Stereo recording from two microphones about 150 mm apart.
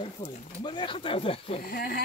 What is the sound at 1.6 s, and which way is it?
Speech, 90° left.